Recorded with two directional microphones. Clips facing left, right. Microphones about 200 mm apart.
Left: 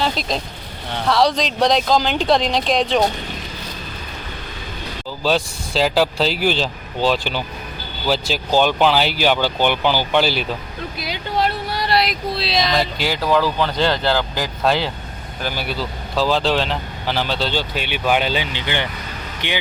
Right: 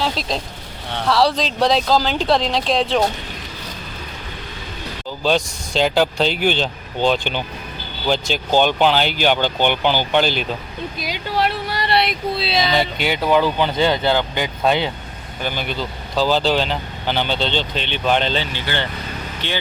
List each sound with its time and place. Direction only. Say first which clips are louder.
0.2 s speech: left 1 dB; 30° right (ahead or behind)
1.0 s speech: even; 5° right (ahead or behind)
5.2 s speech: right 1 dB; centre (ahead or behind)